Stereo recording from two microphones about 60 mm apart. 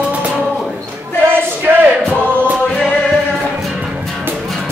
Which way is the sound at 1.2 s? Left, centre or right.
Right.